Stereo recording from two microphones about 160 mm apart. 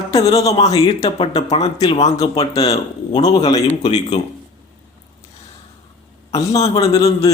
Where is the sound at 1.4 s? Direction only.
45° left (ahead or behind).